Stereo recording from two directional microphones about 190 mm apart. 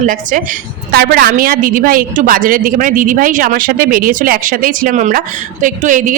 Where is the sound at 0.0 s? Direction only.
45° right (ahead or behind).